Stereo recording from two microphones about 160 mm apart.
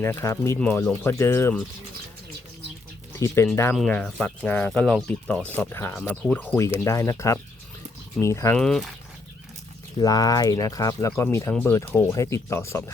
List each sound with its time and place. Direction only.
0.0 s speech: 15° left (ahead or behind)
3.2 s speech: 15° left (ahead or behind)
3.8 s speech: 5° left (ahead or behind)
8.5 s speech: centre (ahead or behind)
10.0 s speech: 25° left (ahead or behind)